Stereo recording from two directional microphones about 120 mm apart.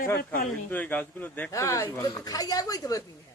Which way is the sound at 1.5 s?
25° left (ahead or behind).